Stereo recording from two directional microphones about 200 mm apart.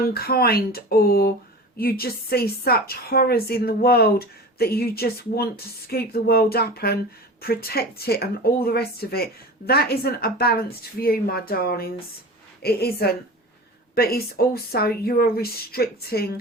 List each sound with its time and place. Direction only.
0.1 s a woman's voice: 50° left (ahead or behind)